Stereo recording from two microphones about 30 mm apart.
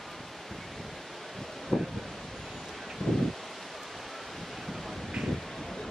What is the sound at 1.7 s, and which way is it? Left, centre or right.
Wind, left.